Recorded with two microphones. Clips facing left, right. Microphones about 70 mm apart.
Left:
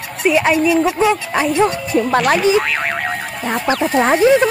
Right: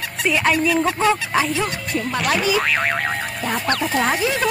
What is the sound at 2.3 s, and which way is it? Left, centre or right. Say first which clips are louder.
Speech: left 4 dB; left.